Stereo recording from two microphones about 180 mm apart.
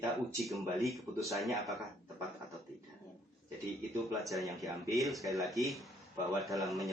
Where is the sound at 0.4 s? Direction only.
Centre (ahead or behind).